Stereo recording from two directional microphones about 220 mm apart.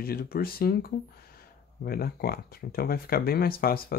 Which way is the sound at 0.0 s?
45° left (ahead or behind).